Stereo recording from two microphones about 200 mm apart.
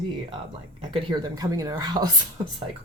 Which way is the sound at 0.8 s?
20° right (ahead or behind).